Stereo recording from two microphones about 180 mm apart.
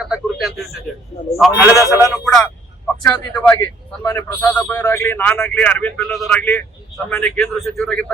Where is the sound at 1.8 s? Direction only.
15° left (ahead or behind).